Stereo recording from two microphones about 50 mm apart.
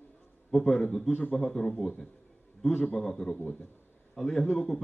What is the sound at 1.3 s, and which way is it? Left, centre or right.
A man's voice, centre.